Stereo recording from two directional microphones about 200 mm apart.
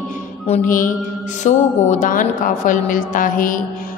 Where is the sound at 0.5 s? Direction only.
40° left (ahead or behind).